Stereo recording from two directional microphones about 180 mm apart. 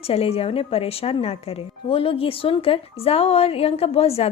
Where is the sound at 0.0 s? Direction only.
35° left (ahead or behind).